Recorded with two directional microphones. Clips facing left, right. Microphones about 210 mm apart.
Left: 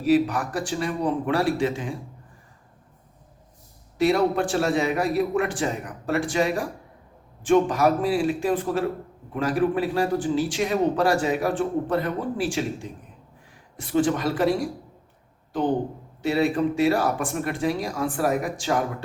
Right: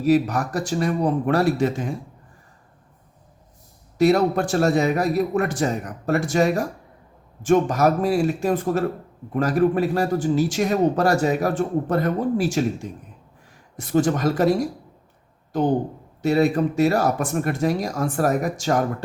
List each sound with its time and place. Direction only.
0.0 s speech: 40° right (ahead or behind)
3.9 s speech: 40° right (ahead or behind)
13.7 s speech: 45° right (ahead or behind)
16.2 s speech: 45° right (ahead or behind)